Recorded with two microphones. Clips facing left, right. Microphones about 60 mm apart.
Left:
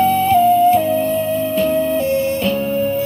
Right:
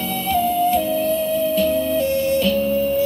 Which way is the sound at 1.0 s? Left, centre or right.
Left.